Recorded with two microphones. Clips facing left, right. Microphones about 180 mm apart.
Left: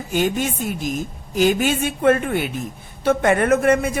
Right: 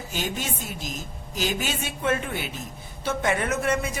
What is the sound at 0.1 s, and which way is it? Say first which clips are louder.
A woman's voice: left 11 dB; 55° left (ahead or behind).